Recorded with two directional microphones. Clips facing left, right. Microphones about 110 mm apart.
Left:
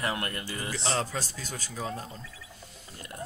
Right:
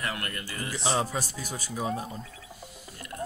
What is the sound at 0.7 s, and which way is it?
Speech, 10° right (ahead or behind).